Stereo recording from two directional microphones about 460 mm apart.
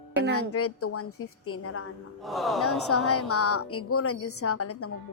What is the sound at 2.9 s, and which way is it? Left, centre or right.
A woman's voice, left.